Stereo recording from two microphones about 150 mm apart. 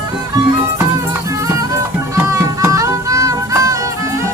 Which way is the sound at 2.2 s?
20° right (ahead or behind).